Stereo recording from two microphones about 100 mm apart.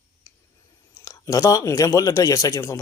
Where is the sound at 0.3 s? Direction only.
25° left (ahead or behind).